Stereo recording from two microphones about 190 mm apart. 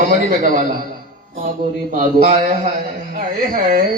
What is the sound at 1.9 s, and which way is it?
Speech, 40° right (ahead or behind).